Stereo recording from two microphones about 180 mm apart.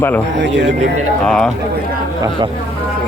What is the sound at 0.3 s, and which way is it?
Speech, 75° right (ahead or behind).